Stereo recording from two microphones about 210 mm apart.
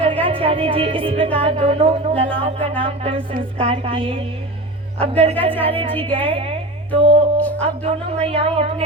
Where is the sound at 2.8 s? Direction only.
25° right (ahead or behind).